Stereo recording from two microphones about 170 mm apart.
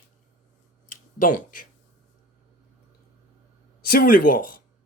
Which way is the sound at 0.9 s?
50° left (ahead or behind).